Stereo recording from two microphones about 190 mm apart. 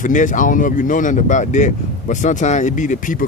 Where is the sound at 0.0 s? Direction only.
40° left (ahead or behind).